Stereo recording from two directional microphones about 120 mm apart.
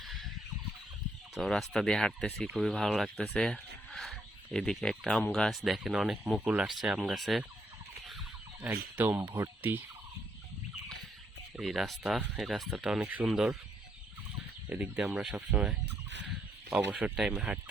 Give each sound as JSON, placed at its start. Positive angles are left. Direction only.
{"t": 0.0, "sound": "a sound", "side_deg": 0}
{"t": 1.4, "sound": "speech", "side_deg": 0}
{"t": 8.6, "sound": "speech", "side_deg": -15}
{"t": 9.6, "sound": "fowl", "side_deg": -15}
{"t": 11.5, "sound": "speech", "side_deg": 0}
{"t": 14.7, "sound": "speech", "side_deg": -10}